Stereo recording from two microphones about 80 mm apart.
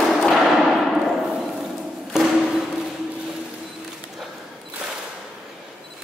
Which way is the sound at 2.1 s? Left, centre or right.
Centre.